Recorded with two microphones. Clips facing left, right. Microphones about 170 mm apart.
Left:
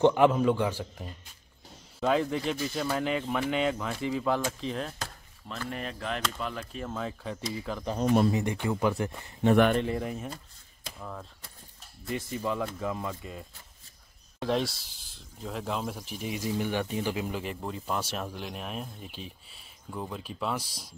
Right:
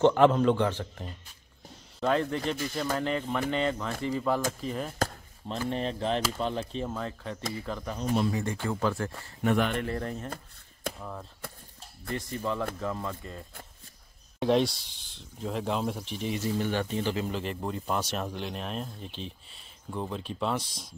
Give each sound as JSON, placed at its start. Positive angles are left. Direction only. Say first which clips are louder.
{"t": 0.0, "sound": "speech", "louder": "right 1 dB", "side_deg": 10}
{"t": 5.7, "sound": "cap gun", "louder": "right 5 dB", "side_deg": -30}
{"t": 6.9, "sound": "speech", "louder": "even", "side_deg": 5}
{"t": 8.0, "sound": "speech", "louder": "left 4 dB", "side_deg": 50}
{"t": 8.3, "sound": "speech", "louder": "left 2 dB", "side_deg": 20}
{"t": 11.0, "sound": "speech", "louder": "right 1 dB", "side_deg": -5}
{"t": 12.2, "sound": "speech", "louder": "even", "side_deg": 5}